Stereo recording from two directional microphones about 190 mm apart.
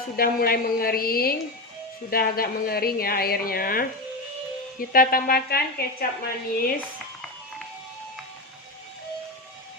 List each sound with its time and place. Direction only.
0.2 s a woman's voice: 50° left (ahead or behind)